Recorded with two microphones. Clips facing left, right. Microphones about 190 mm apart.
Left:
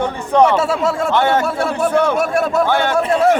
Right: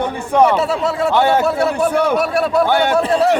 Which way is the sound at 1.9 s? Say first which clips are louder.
Left 1 dB; 10° right (ahead or behind).